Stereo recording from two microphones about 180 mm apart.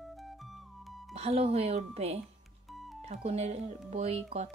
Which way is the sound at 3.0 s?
35° right (ahead or behind).